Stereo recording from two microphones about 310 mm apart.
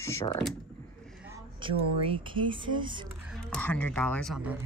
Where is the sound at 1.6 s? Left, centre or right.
Centre.